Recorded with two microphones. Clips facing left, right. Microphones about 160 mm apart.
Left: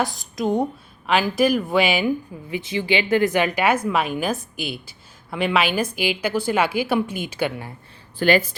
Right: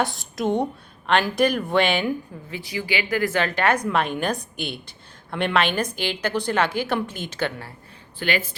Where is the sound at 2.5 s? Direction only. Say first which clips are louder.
Left 5 dB; 25° left (ahead or behind).